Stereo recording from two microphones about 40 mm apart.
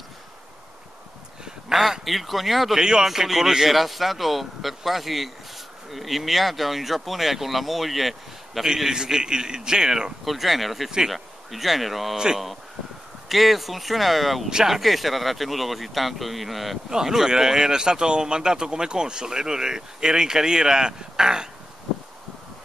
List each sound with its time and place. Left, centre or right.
1.7 s speech: centre
2.8 s speech: centre
3.1 s speech: centre
8.6 s speech: centre
10.2 s speech: centre
13.3 s speech: centre
14.5 s speech: centre
14.8 s speech: centre
16.9 s speech: centre